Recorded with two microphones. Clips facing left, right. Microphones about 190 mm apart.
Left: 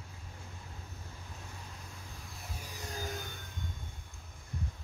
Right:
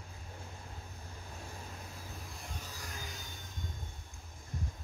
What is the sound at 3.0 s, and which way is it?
Music, 50° left (ahead or behind).